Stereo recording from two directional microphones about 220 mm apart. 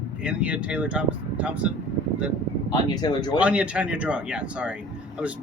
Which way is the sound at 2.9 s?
20° left (ahead or behind).